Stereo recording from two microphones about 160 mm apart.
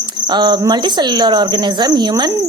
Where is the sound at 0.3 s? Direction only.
25° right (ahead or behind).